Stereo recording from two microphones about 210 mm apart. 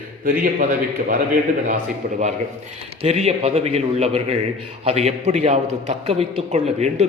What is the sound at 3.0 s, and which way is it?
A man's voice, 30° right (ahead or behind).